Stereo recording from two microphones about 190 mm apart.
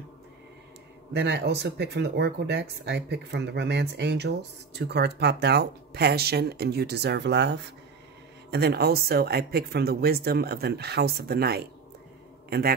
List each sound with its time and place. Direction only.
1.1 s a man's voice: 65° right (ahead or behind)